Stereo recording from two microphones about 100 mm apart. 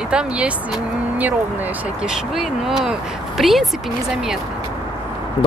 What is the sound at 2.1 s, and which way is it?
Speech, 5° right (ahead or behind).